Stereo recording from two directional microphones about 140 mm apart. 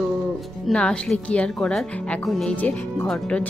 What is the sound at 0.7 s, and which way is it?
Speech, 5° left (ahead or behind).